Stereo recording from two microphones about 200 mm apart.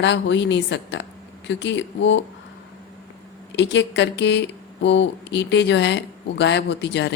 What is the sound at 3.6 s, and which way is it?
A woman's voice, 60° left (ahead or behind).